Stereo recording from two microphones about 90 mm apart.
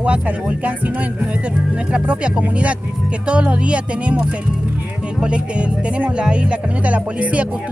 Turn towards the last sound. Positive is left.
turn(degrees=-15)  # may be behind; listen again after turning